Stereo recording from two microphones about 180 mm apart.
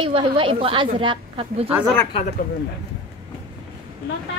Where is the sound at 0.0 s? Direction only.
30° right (ahead or behind).